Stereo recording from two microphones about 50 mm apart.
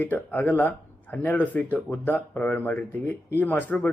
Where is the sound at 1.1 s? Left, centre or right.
Left.